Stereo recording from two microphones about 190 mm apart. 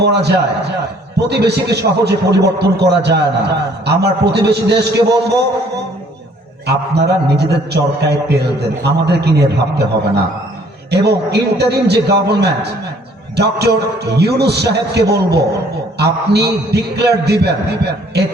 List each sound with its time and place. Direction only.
0.0 s a man's voice: 60° right (ahead or behind)
10.9 s a man's voice: 60° right (ahead or behind)